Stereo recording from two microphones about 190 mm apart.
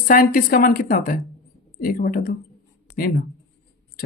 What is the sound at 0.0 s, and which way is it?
Speech, 50° left (ahead or behind).